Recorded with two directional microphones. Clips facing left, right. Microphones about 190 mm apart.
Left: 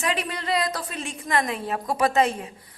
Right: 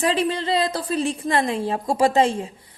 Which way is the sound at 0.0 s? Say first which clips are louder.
Right 6 dB; 30° right (ahead or behind).